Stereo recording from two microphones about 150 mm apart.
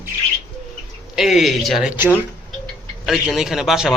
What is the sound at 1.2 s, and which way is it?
Speech, centre (ahead or behind).